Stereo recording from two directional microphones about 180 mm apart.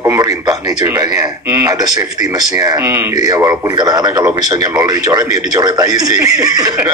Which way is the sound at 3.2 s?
20° right (ahead or behind).